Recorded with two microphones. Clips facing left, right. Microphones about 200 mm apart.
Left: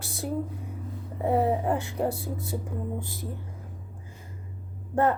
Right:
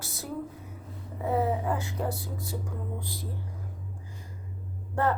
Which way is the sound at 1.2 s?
30° left (ahead or behind).